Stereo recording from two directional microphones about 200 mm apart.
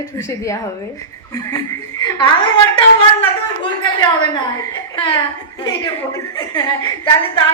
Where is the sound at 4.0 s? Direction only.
20° left (ahead or behind).